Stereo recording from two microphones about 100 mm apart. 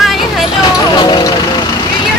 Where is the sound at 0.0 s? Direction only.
Centre (ahead or behind).